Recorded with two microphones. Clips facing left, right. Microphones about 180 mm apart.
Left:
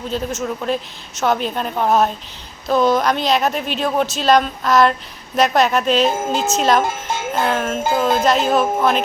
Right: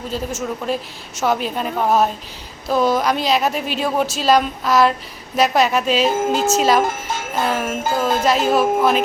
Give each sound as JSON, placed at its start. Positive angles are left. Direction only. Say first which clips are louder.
{"t": 0.3, "sound": "a woman's voice", "louder": "left 1 dB", "side_deg": -5}
{"t": 7.9, "sound": "speech", "louder": "left 2 dB", "side_deg": 20}
{"t": 8.2, "sound": "a woman's voice", "louder": "even", "side_deg": -5}